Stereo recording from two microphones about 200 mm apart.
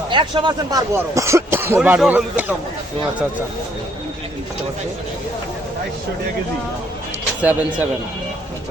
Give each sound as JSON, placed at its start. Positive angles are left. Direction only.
{"t": 0.1, "sound": "speech", "side_deg": -25}
{"t": 7.4, "sound": "speech", "side_deg": -10}